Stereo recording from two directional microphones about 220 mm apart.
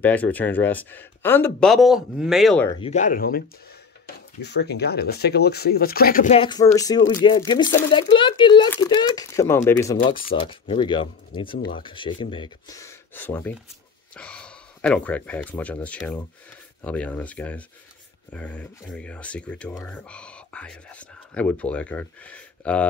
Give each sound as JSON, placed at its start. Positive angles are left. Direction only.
{"t": 0.0, "sound": "speech", "side_deg": 5}
{"t": 2.7, "sound": "speech", "side_deg": 30}
{"t": 6.4, "sound": "speech", "side_deg": 15}
{"t": 8.6, "sound": "speech", "side_deg": 10}